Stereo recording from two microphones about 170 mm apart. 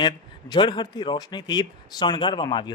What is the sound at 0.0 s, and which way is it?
A man's voice, 25° left (ahead or behind).